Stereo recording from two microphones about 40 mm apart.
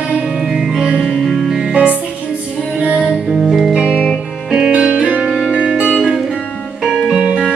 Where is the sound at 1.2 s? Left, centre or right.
Centre.